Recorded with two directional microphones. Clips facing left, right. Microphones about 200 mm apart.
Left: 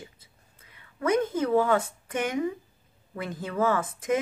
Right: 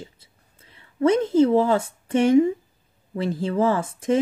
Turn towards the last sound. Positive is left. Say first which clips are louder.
# right 4 dB
turn(degrees=-30)  # may be behind; listen again after turning